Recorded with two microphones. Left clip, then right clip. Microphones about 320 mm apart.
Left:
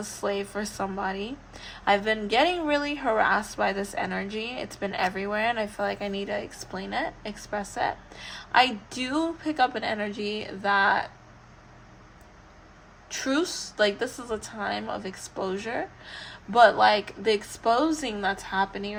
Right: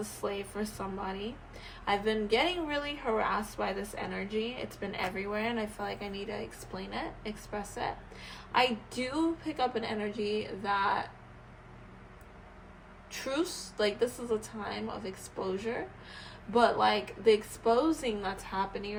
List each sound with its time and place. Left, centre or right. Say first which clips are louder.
0.2 s a woman's voice: left 8 dB; left
13.1 s a woman's voice: left 6 dB; left